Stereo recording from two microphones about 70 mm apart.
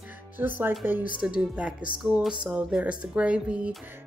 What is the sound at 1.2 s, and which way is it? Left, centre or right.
Speech, centre.